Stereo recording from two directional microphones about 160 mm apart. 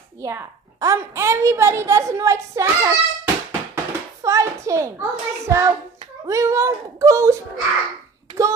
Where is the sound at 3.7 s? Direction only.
20° right (ahead or behind).